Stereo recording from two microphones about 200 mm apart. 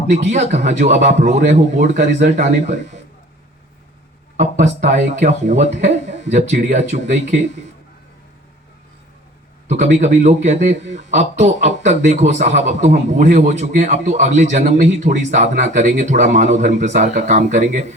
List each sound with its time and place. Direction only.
0.1 s speech: 35° right (ahead or behind)
4.4 s speech: 35° right (ahead or behind)
9.6 s speech: 35° right (ahead or behind)